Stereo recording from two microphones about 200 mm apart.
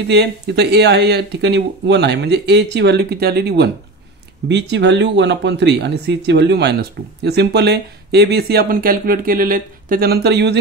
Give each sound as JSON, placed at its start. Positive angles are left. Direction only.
{"t": 0.1, "sound": "speech", "side_deg": -55}